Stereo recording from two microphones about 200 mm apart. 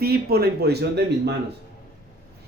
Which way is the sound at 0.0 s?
50° right (ahead or behind).